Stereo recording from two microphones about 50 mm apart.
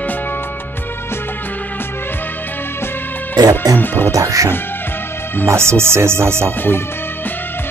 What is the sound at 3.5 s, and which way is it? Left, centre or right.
Speech, left.